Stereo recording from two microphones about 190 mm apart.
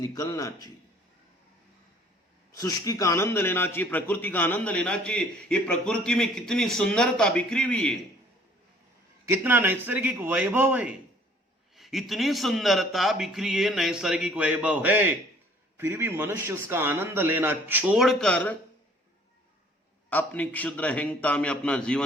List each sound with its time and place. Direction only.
0.0 s a man's voice: 20° left (ahead or behind)
2.6 s a man's voice: 20° left (ahead or behind)
9.2 s a man's voice: 10° right (ahead or behind); by 18.5 s 5° left (ahead or behind)
20.1 s a man's voice: 10° left (ahead or behind)